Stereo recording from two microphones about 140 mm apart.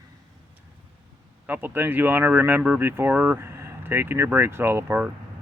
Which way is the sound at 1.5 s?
15° right (ahead or behind).